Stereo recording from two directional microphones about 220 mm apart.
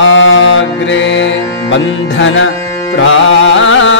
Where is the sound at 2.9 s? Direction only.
60° left (ahead or behind).